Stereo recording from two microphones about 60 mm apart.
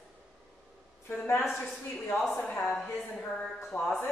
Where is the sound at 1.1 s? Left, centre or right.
Left.